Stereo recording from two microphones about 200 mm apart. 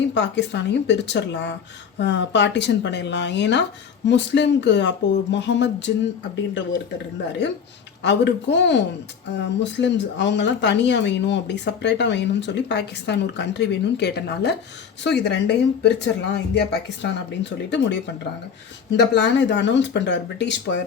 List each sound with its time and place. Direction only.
0.1 s speech: 60° left (ahead or behind)
8.0 s speech: 60° left (ahead or behind)
19.1 s speech: 60° left (ahead or behind)